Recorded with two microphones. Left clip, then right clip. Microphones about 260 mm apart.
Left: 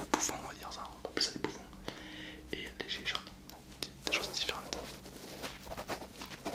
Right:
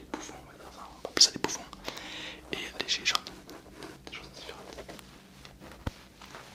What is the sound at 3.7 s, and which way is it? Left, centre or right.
Whispering, centre.